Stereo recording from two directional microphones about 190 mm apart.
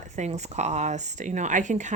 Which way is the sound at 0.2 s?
35° right (ahead or behind).